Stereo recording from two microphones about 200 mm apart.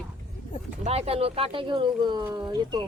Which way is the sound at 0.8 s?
30° right (ahead or behind).